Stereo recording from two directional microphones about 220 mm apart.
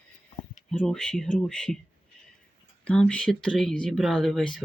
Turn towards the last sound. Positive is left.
turn(degrees=0)  # may be behind; listen again after turning